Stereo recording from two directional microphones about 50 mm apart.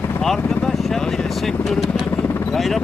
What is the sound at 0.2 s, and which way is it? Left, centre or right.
Speech, centre.